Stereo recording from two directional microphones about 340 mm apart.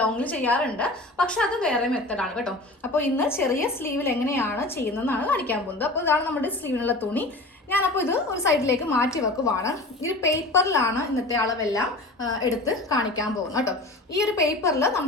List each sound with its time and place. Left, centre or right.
0.0 s a woman's voice: centre